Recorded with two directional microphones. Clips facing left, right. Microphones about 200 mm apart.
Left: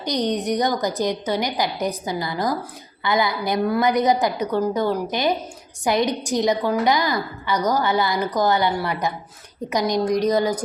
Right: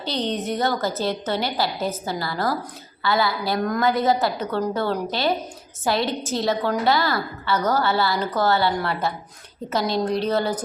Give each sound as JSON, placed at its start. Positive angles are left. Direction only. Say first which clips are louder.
{"t": 0.0, "sound": "a woman's voice", "louder": "left 3 dB", "side_deg": 15}